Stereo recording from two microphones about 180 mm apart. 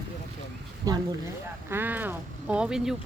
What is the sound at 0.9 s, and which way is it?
Speech, 20° right (ahead or behind).